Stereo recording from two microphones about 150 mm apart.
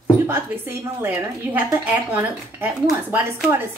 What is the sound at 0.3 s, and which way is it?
A woman's voice, 15° right (ahead or behind).